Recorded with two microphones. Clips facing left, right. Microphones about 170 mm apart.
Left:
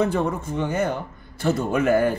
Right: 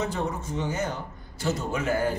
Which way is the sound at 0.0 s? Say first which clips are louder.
Left 7 dB; 55° left (ahead or behind).